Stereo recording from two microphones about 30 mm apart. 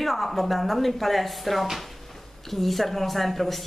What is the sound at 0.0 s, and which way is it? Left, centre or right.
Speech, centre.